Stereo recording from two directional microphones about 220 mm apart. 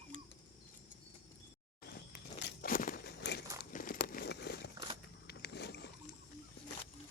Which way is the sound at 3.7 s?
40° left (ahead or behind).